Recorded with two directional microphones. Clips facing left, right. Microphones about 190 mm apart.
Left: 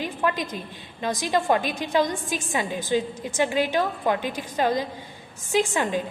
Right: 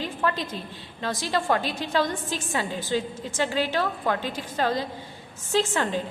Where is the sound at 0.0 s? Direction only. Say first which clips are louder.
Left 1 dB; 15° left (ahead or behind).